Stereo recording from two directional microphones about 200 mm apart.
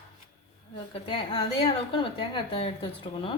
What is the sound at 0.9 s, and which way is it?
A woman's voice, 25° left (ahead or behind).